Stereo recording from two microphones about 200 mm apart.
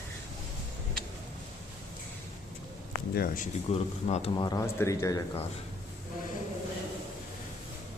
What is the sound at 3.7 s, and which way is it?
Speech, 30° left (ahead or behind).